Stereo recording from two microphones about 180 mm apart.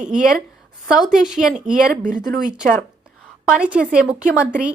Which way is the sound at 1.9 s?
45° right (ahead or behind).